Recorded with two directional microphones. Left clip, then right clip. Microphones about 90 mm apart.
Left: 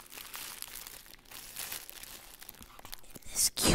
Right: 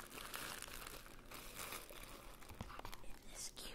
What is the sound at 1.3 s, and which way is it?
Crumpling, 50° left (ahead or behind).